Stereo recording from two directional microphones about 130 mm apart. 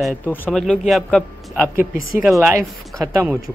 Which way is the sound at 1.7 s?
90° left.